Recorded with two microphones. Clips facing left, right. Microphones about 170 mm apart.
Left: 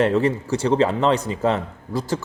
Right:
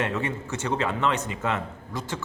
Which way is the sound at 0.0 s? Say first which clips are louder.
Left 9 dB; 35° left (ahead or behind).